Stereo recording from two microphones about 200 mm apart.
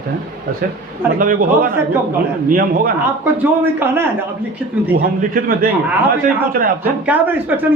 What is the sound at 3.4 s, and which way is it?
Speech, 10° right (ahead or behind).